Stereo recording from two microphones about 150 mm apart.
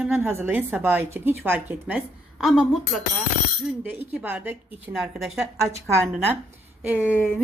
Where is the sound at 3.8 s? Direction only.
10° right (ahead or behind).